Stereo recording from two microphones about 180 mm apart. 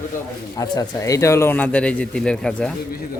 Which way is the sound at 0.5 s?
20° left (ahead or behind).